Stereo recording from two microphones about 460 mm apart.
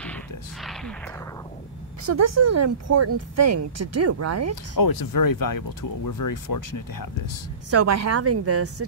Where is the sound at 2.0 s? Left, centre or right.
Right.